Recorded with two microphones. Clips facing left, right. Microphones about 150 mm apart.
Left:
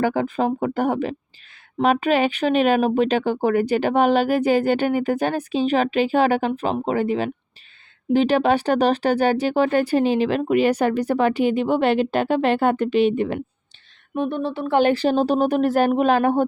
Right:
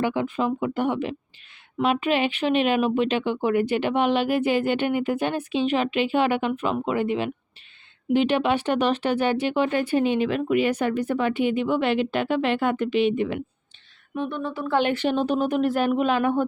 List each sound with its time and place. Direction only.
0.0 s speech: 40° left (ahead or behind)
14.4 s speech: 30° left (ahead or behind)